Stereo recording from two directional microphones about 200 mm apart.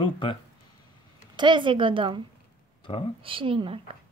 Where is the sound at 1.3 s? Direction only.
25° right (ahead or behind).